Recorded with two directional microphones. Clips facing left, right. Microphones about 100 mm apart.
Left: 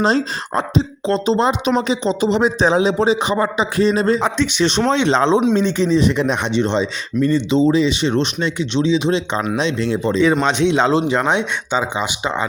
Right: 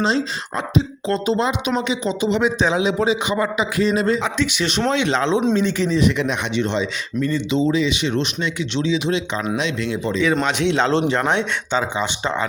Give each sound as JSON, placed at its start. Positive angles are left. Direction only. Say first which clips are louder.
{"t": 0.0, "sound": "speech", "louder": "left 3 dB", "side_deg": 40}
{"t": 1.0, "sound": "speech", "louder": "left 6 dB", "side_deg": 25}
{"t": 10.4, "sound": "speech", "louder": "left 3 dB", "side_deg": 20}